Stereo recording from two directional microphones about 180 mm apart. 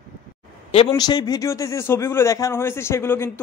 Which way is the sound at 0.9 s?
20° left (ahead or behind).